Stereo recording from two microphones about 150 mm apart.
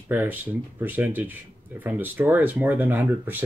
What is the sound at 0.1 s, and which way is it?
Speech, 10° right (ahead or behind).